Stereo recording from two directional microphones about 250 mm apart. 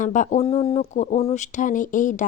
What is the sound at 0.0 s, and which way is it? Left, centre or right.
Speech, left.